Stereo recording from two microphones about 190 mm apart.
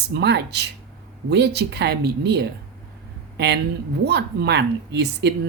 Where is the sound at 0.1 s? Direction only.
60° right (ahead or behind).